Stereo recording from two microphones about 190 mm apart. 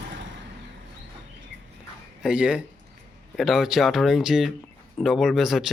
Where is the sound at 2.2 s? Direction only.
5° right (ahead or behind).